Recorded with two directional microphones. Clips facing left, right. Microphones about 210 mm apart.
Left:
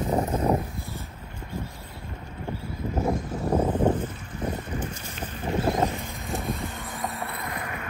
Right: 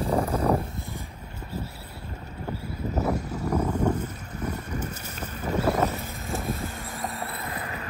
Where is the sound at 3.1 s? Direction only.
10° right (ahead or behind).